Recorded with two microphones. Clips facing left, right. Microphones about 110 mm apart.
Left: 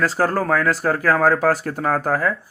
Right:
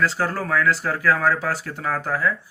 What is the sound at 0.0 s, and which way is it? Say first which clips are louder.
Speech: left 4 dB; 45° left (ahead or behind).